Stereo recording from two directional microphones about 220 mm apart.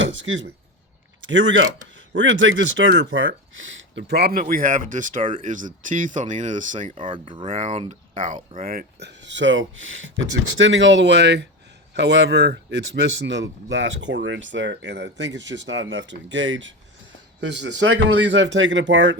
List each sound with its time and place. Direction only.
0.0 s a sound: 60° right (ahead or behind)
1.3 s speech: 60° right (ahead or behind); by 7.0 s 35° right (ahead or behind)
7.0 s a man's voice: 20° right (ahead or behind); by 19.1 s 55° right (ahead or behind)